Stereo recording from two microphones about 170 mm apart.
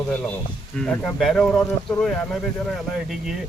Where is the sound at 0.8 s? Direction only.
5° left (ahead or behind).